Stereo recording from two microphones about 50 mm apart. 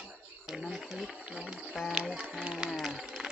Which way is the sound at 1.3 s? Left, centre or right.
Centre.